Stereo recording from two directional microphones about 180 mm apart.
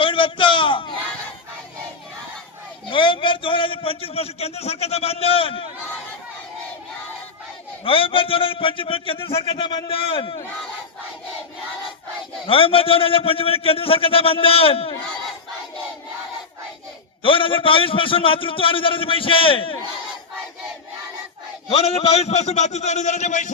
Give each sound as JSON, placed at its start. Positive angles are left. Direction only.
{"t": 0.0, "sound": "a sound", "side_deg": 30}
{"t": 2.9, "sound": "a man's voice", "side_deg": 25}
{"t": 7.9, "sound": "a man's voice", "side_deg": 30}
{"t": 12.5, "sound": "a man's voice", "side_deg": 30}
{"t": 17.2, "sound": "a man's voice", "side_deg": 30}
{"t": 21.7, "sound": "a man's voice", "side_deg": 35}